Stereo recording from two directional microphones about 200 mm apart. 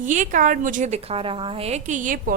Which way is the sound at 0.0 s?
40° right (ahead or behind).